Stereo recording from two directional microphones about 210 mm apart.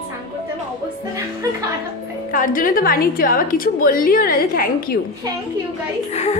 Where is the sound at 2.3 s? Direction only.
40° left (ahead or behind).